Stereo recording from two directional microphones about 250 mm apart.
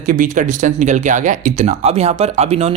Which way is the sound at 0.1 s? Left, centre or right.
Right.